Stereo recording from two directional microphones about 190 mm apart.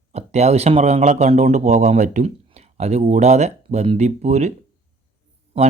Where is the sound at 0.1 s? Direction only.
35° right (ahead or behind).